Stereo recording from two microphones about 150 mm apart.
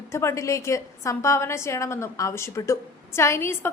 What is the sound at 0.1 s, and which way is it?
A woman's voice, 20° left (ahead or behind).